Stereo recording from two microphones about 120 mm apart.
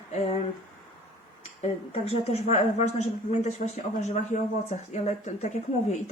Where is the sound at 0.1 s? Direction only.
65° left (ahead or behind).